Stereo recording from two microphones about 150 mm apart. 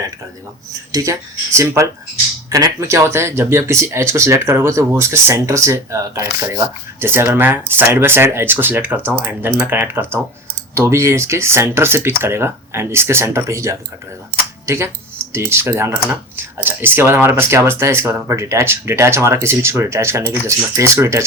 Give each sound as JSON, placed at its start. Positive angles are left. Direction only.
{"t": 0.7, "sound": "speech", "side_deg": -20}